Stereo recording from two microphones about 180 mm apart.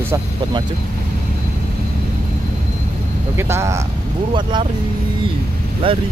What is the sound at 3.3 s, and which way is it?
Speech, 15° right (ahead or behind).